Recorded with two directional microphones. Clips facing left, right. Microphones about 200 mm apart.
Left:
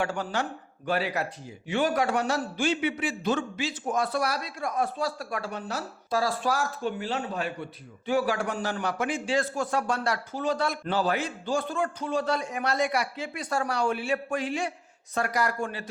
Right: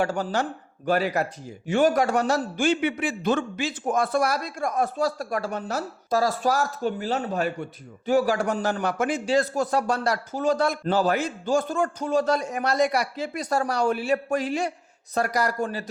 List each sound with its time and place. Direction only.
0.0 s a man's voice: 40° right (ahead or behind)